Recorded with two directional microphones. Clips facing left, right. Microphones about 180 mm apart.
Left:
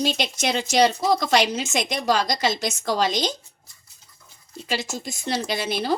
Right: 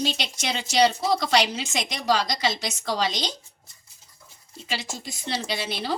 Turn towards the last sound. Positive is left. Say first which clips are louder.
# left 4 dB
turn(degrees=45)  # may be behind; listen again after turning